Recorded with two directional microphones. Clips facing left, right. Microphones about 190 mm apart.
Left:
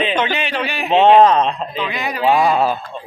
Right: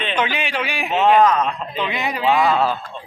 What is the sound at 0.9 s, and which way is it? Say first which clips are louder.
Speech: left 5 dB; 30° left (ahead or behind).